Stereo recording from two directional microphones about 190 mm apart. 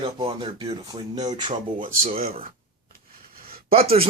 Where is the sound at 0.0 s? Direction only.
25° right (ahead or behind).